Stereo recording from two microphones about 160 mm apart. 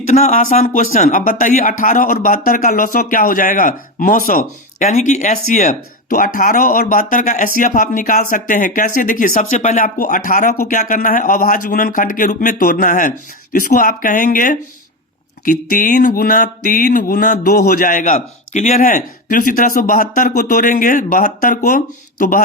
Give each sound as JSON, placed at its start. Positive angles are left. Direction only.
{"t": 0.1, "sound": "speech", "side_deg": 50}